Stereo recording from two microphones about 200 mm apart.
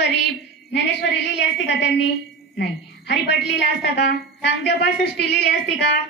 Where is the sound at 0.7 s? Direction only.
55° left (ahead or behind).